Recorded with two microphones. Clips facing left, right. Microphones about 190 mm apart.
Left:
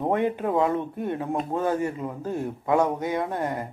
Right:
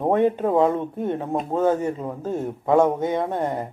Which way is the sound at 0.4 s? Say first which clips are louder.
Right 4 dB; 25° right (ahead or behind).